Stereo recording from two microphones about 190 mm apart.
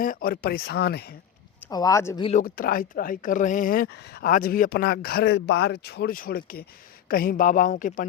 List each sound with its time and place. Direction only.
0.0 s speech: 50° left (ahead or behind)
1.7 s speech: 15° left (ahead or behind)
2.4 s speech: 50° left (ahead or behind)
5.3 s speech: 70° left (ahead or behind); by 8.0 s 45° left (ahead or behind)